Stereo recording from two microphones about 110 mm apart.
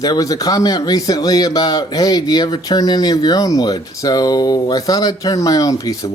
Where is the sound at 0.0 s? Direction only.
35° left (ahead or behind).